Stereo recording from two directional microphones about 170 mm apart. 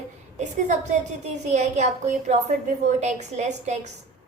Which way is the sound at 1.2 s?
45° right (ahead or behind).